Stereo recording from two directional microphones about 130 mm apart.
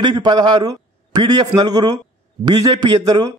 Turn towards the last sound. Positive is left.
turn(degrees=-30)  # may be behind; listen again after turning